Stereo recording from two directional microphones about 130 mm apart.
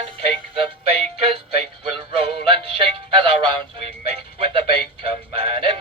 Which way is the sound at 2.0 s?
45° right (ahead or behind).